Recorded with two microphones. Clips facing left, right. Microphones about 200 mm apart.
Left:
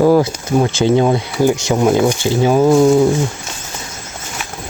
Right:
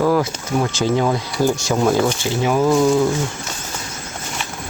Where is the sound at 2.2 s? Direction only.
30° left (ahead or behind).